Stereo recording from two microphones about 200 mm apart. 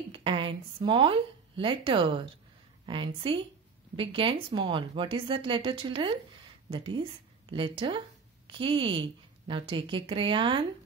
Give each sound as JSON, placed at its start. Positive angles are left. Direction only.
{"t": 0.1, "sound": "a woman's voice", "side_deg": -25}